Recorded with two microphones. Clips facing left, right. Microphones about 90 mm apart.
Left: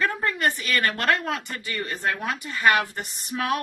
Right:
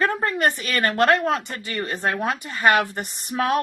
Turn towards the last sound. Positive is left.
turn(degrees=-35)  # may be behind; listen again after turning